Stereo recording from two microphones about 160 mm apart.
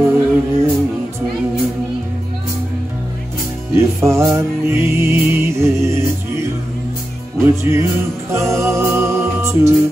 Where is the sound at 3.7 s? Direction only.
15° right (ahead or behind).